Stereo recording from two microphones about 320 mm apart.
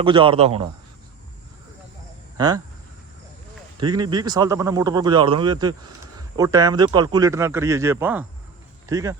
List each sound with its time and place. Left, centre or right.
0.0 s a man's voice: centre
3.8 s a man's voice: centre